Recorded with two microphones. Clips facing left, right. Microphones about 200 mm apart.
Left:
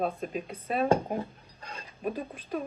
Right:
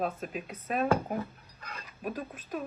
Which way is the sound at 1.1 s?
30° left (ahead or behind).